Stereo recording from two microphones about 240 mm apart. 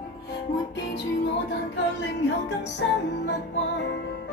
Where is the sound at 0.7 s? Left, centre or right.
Left.